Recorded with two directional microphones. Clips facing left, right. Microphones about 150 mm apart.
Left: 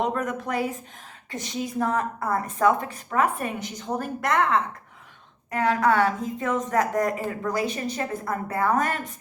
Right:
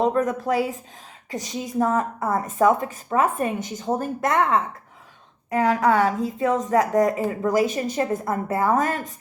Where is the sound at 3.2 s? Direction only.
40° right (ahead or behind).